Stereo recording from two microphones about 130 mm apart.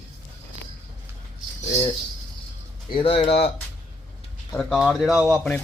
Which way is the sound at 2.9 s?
45° left (ahead or behind).